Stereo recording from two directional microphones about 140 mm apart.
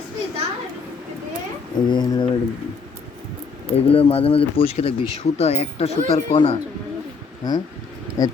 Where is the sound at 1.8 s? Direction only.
30° left (ahead or behind).